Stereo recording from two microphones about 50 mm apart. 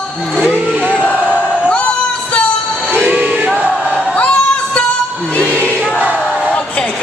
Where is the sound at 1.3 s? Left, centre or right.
Left.